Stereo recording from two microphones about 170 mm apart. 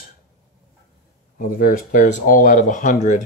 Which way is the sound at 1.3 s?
55° left (ahead or behind).